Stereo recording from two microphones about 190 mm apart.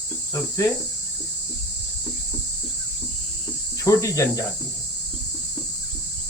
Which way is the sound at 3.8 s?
15° left (ahead or behind).